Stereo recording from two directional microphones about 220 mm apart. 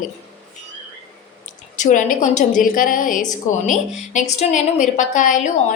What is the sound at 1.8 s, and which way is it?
A woman's voice, 35° left (ahead or behind).